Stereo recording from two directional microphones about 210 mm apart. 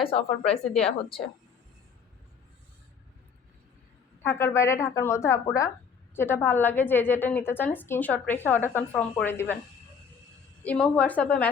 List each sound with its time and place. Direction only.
0.0 s a woman's voice: 30° left (ahead or behind)
4.2 s a woman's voice: 10° left (ahead or behind)
10.6 s a woman's voice: 5° left (ahead or behind)